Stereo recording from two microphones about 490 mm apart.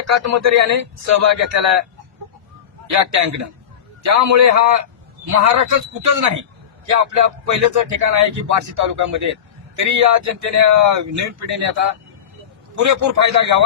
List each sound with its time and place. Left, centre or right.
0.0 s speech: right
2.9 s speech: right
6.9 s speech: right